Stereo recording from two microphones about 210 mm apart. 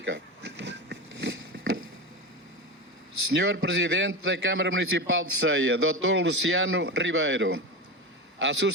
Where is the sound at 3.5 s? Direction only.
60° right (ahead or behind).